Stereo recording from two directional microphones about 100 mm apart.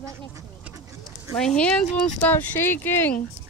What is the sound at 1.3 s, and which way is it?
Speech, 5° left (ahead or behind).